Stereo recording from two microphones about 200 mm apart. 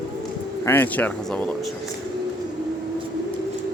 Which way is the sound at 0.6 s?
10° left (ahead or behind).